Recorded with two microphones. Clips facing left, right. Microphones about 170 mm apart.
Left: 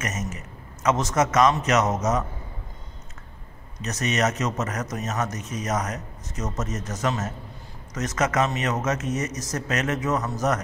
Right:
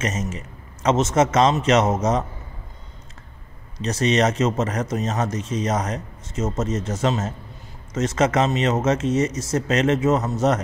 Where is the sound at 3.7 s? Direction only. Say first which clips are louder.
Right 6 dB; 30° right (ahead or behind).